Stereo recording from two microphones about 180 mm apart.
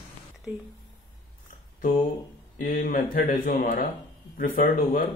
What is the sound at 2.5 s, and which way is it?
Speech, 50° left (ahead or behind).